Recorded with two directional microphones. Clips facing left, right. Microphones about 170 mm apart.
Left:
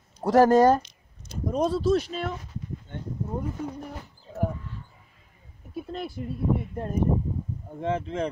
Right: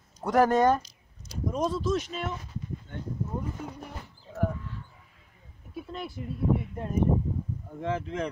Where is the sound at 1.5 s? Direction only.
35° left (ahead or behind).